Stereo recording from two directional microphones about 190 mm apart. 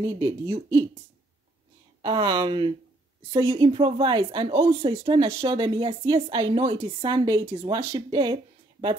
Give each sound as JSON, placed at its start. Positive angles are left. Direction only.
{"t": 0.0, "sound": "a woman's voice", "side_deg": -20}
{"t": 2.0, "sound": "a woman's voice", "side_deg": -25}